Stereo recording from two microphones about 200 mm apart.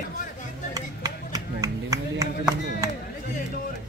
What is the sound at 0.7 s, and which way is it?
Clapping, 15° right (ahead or behind).